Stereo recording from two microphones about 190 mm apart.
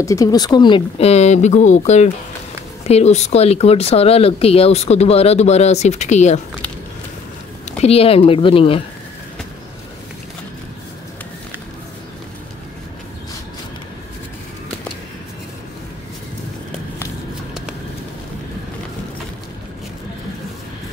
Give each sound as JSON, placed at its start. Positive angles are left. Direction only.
{"t": 0.0, "sound": "speech", "side_deg": 15}
{"t": 7.8, "sound": "speech", "side_deg": 30}